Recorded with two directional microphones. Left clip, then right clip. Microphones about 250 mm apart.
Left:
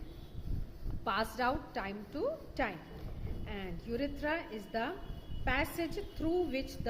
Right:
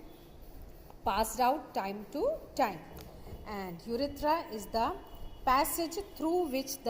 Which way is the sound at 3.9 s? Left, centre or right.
Centre.